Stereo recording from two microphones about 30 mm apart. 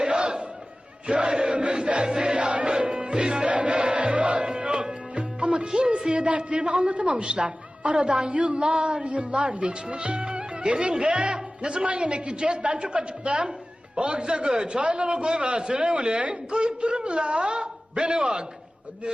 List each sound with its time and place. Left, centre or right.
0.0 s battle cry: right
1.0 s chant: right
2.8 s music: right
3.1 s music: right
6.1 s a man's voice: right
11.3 s a man's voice: right